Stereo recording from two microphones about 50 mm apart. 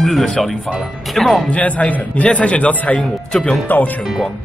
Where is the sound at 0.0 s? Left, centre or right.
Centre.